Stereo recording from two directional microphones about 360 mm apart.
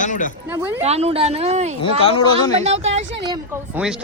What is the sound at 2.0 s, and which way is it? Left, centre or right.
Speech, centre.